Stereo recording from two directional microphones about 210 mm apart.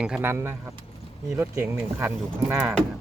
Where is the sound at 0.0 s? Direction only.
5° right (ahead or behind).